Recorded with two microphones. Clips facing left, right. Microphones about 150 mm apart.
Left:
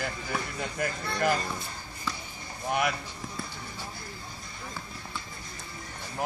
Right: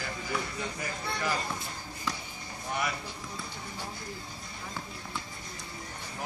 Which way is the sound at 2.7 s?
60° left (ahead or behind).